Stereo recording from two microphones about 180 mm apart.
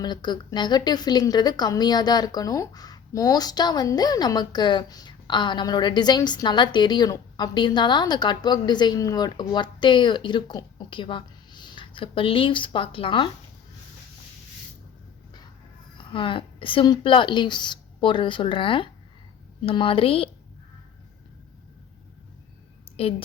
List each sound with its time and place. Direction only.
0.0 s a woman's voice: 25° left (ahead or behind)
16.1 s a woman's voice: 30° left (ahead or behind)
23.0 s speech: 30° left (ahead or behind)